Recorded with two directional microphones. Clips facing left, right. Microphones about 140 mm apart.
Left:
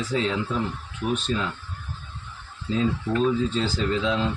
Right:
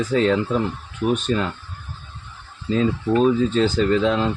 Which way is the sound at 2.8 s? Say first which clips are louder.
Right 5 dB; 60° right (ahead or behind).